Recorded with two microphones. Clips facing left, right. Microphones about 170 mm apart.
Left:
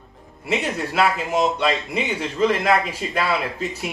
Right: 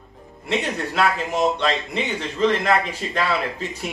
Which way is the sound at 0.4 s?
5° left (ahead or behind).